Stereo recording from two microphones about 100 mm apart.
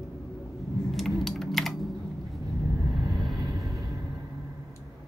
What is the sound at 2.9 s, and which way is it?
Vehicle, centre (ahead or behind).